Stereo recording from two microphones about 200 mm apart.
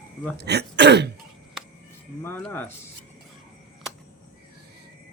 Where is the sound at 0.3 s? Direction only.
55° right (ahead or behind).